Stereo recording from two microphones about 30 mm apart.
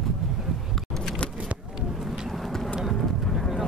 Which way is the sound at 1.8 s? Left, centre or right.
Centre.